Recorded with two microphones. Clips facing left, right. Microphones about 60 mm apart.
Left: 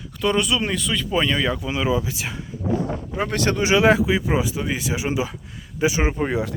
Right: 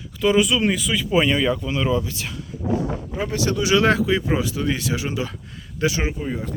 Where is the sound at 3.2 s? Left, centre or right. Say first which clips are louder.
Left 1 dB; left.